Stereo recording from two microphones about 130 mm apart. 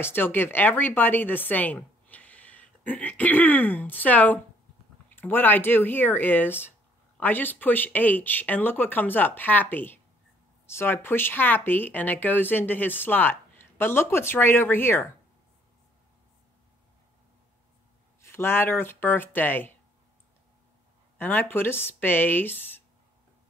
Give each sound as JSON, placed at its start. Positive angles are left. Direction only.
{"t": 0.0, "sound": "speech", "side_deg": 15}
{"t": 18.2, "sound": "speech", "side_deg": 20}
{"t": 21.2, "sound": "speech", "side_deg": 15}